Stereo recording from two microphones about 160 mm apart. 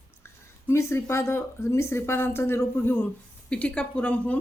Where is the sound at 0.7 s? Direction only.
15° left (ahead or behind).